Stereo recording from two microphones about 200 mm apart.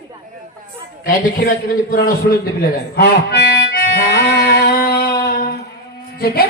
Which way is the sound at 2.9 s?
55° left (ahead or behind).